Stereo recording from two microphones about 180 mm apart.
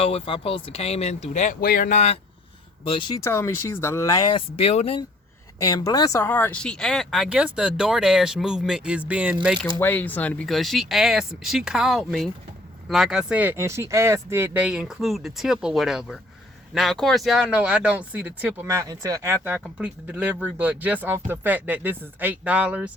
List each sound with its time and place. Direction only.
0.0 s speech: 30° left (ahead or behind)
2.9 s speech: 25° left (ahead or behind)
5.5 s speech: 20° left (ahead or behind); by 9.6 s 5° right (ahead or behind)
9.7 s speech: 10° left (ahead or behind); by 22.9 s 5° right (ahead or behind)